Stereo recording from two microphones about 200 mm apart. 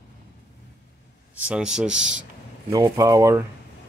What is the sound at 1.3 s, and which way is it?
Speech, 5° right (ahead or behind).